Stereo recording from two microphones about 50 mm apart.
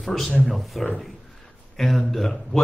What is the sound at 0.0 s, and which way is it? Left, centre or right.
Speech, centre.